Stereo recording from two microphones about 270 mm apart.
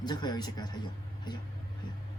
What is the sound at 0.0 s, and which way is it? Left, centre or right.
Speech, centre.